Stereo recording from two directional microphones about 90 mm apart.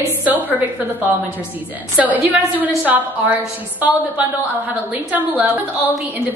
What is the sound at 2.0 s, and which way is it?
A woman's voice, 20° right (ahead or behind).